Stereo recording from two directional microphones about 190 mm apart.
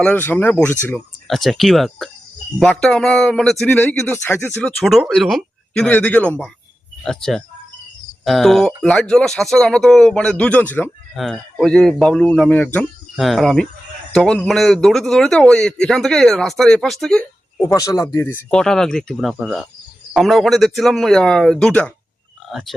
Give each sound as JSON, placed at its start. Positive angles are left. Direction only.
{"t": 0.0, "sound": "speech", "side_deg": 10}
{"t": 17.6, "sound": "speech", "side_deg": 15}